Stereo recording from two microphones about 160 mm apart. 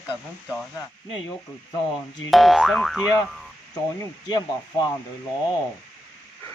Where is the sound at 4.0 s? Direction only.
25° left (ahead or behind).